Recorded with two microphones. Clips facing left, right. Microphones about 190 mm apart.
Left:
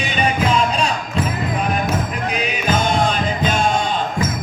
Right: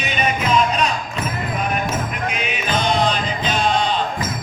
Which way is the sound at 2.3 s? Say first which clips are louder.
Left 5 dB; 40° left (ahead or behind).